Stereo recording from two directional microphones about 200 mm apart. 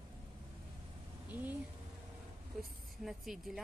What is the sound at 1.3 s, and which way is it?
Speech, 10° right (ahead or behind).